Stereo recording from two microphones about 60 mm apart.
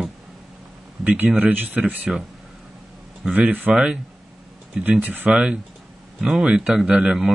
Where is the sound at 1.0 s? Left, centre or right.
Right.